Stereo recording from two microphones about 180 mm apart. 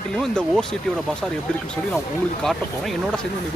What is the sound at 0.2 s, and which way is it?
Speech, 5° left (ahead or behind).